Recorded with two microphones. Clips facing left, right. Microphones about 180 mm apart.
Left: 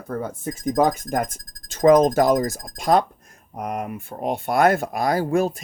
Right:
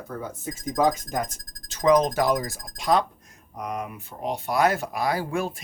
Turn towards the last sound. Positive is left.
turn(degrees=45)  # may be behind; listen again after turning